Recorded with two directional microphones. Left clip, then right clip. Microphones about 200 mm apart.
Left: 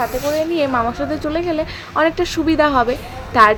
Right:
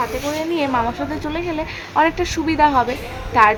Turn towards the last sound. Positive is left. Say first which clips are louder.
# left 2 dB
turn(degrees=10)  # may be behind; listen again after turning